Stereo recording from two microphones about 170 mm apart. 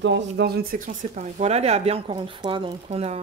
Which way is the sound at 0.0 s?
85° right.